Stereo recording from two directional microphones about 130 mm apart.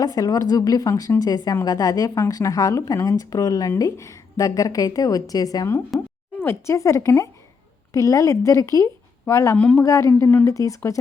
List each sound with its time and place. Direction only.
0.0 s a woman's voice: 30° left (ahead or behind)
9.6 s speech: 10° left (ahead or behind)
9.8 s a woman's voice: 25° left (ahead or behind)